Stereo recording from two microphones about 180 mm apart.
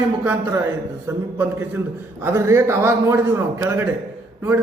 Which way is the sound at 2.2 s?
15° right (ahead or behind).